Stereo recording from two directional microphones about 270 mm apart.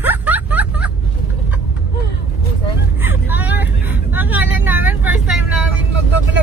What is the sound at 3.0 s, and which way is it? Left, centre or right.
Vehicle, centre.